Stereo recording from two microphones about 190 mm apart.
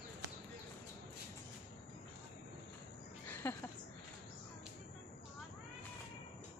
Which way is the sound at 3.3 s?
10° left (ahead or behind).